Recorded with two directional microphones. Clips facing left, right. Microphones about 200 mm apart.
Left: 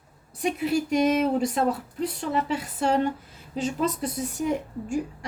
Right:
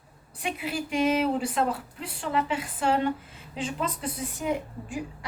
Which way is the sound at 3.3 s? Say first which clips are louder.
Left 4 dB; 40° left (ahead or behind).